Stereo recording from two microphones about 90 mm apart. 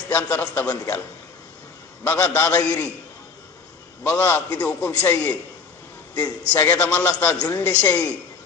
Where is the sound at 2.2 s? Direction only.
25° left (ahead or behind).